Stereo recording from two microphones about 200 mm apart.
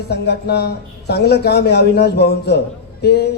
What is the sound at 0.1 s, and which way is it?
A man's voice, 55° left (ahead or behind).